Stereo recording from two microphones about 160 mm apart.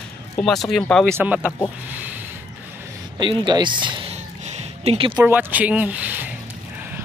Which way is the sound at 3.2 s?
30° right (ahead or behind).